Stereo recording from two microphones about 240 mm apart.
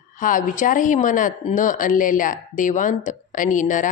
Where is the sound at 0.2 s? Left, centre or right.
Left.